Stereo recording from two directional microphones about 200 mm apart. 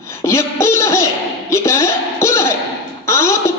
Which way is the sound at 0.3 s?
15° left (ahead or behind).